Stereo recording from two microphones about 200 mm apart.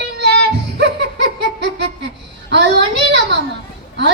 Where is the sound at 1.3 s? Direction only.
60° right (ahead or behind).